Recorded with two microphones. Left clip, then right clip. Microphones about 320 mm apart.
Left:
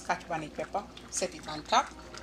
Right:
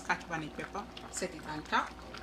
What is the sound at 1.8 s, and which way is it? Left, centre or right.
Speech, centre.